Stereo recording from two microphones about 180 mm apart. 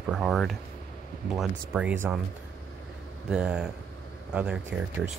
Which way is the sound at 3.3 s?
5° right (ahead or behind).